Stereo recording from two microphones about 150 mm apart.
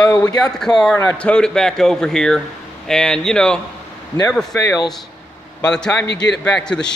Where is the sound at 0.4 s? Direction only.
5° left (ahead or behind).